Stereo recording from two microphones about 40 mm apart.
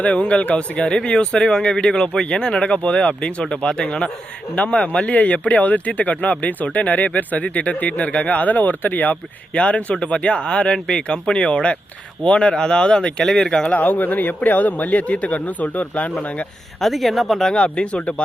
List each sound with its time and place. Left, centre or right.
0.0 s speech: left
9.6 s speech: left
11.3 s speech: left; by 13.7 s centre
13.7 s speech: left
16.8 s speech: centre
17.5 s speech: left